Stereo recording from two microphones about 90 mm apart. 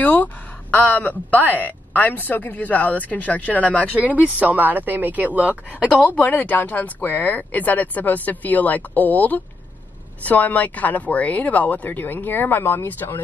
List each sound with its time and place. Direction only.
0.0 s speech: 15° left (ahead or behind)
4.0 s speech: 15° right (ahead or behind)
5.9 s speech: 15° left (ahead or behind)